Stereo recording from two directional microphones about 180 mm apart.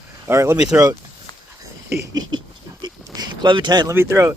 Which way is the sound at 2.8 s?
25° right (ahead or behind).